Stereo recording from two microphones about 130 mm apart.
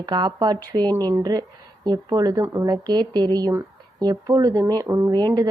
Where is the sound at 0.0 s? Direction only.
35° right (ahead or behind).